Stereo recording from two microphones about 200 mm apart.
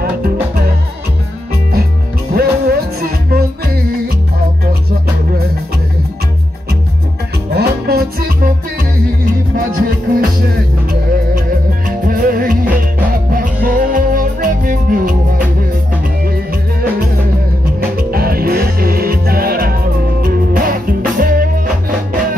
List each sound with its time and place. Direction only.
0.0 s music: 50° right (ahead or behind)
2.3 s music: 50° right (ahead or behind)
7.5 s music: 50° right (ahead or behind)
12.1 s music: 45° right (ahead or behind)
18.1 s music: 50° right (ahead or behind)